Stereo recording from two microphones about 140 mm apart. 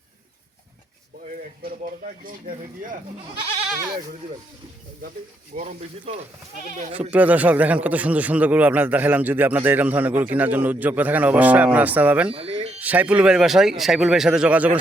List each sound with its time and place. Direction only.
5.5 s speech: 50° right (ahead or behind)
7.1 s a man's voice: 10° right (ahead or behind)
12.3 s music: 45° right (ahead or behind)
12.8 s speech: 10° right (ahead or behind)